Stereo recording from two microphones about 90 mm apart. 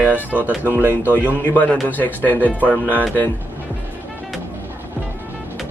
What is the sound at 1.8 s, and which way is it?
Speech, 20° left (ahead or behind).